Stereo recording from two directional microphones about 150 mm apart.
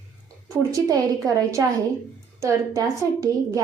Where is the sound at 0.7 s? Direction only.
20° right (ahead or behind).